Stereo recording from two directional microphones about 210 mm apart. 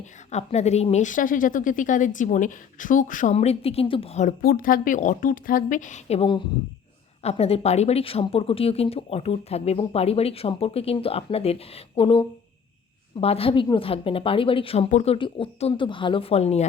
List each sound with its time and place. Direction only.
0.3 s a woman's voice: 30° left (ahead or behind)